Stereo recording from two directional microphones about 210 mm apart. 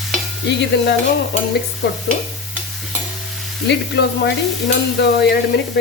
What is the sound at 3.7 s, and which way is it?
A woman's voice, 55° left (ahead or behind).